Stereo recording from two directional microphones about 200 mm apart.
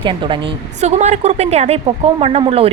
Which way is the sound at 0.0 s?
25° right (ahead or behind).